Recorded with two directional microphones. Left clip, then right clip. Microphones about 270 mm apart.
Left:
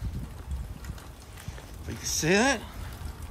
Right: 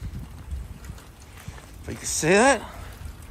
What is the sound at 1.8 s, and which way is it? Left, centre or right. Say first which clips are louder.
Speech: right 4 dB; centre.